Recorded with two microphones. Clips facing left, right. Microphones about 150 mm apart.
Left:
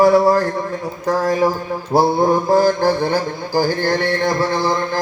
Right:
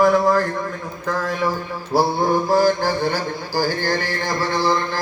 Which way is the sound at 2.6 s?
50° left (ahead or behind).